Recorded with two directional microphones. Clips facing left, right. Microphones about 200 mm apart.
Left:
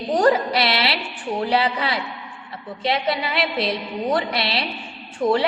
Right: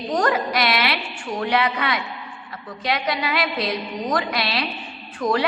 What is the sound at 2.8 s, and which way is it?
A woman's voice, 25° left (ahead or behind).